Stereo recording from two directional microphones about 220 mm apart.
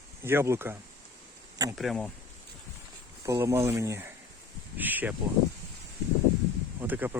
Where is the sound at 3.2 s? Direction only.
15° right (ahead or behind).